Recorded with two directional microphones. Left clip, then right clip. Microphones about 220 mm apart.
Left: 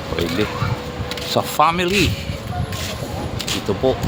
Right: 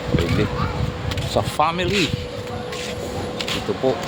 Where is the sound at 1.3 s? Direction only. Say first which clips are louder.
Left 4 dB; 15° left (ahead or behind).